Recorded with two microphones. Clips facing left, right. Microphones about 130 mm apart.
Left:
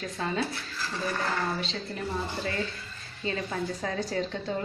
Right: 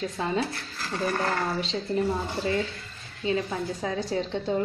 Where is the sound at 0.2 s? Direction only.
20° right (ahead or behind).